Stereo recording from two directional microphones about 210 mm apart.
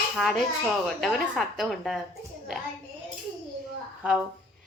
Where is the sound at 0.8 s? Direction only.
Centre (ahead or behind).